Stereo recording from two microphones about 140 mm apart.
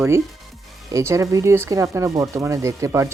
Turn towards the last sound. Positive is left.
turn(degrees=-20)  # may be behind; listen again after turning